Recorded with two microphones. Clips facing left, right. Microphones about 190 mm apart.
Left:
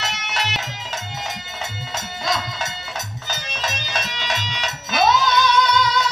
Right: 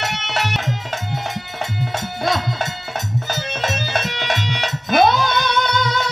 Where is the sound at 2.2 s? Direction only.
60° right (ahead or behind).